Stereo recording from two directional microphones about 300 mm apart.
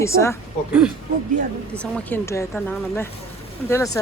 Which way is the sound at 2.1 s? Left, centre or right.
Centre.